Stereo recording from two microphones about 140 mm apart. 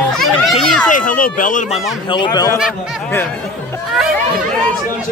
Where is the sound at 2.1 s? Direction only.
30° left (ahead or behind).